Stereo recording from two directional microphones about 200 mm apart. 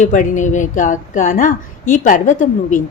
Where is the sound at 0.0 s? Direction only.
40° left (ahead or behind).